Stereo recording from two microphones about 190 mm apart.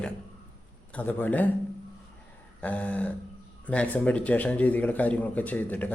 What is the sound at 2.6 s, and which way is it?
Speech, 5° left (ahead or behind).